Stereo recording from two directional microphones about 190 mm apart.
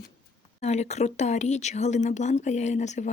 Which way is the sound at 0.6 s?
35° left (ahead or behind).